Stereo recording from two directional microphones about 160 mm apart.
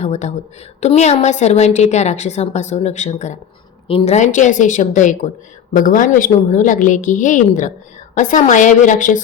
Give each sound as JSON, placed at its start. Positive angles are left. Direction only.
{"t": 0.0, "sound": "a woman's voice", "side_deg": 45}